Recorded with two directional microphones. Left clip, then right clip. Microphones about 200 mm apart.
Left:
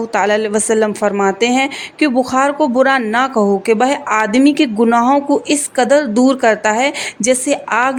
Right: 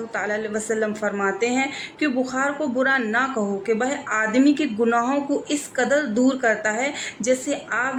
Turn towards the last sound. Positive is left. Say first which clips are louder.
# left 10 dB
turn(degrees=50)  # may be behind; listen again after turning